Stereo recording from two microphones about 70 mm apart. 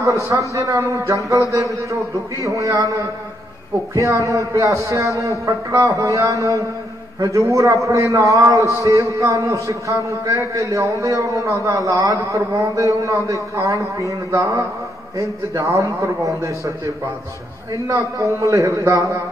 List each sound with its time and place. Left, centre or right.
0.0 s a man's voice: right
17.9 s a man's voice: right